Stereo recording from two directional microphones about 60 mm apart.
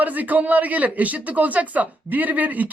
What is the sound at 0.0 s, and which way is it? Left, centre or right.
Speech, right.